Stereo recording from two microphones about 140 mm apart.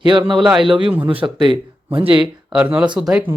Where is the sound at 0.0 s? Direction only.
35° right (ahead or behind).